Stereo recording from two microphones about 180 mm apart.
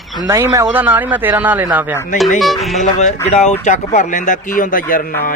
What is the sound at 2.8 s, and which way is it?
Speech, 40° left (ahead or behind).